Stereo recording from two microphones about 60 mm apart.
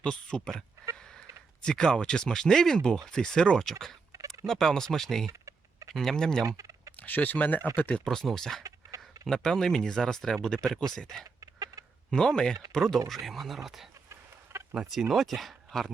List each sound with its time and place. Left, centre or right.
0.0 s speech: centre
0.9 s a sound: centre
1.6 s speech: centre
5.3 s fowl: right
5.9 s speech: centre
6.6 s fowl: right
6.9 s speech: left
8.0 s speech: centre
11.3 s chicken: right
12.1 s speech: centre
14.5 s a sound: right
14.8 s speech: centre